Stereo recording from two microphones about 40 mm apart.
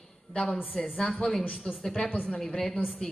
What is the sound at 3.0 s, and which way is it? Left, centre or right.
Speech, left.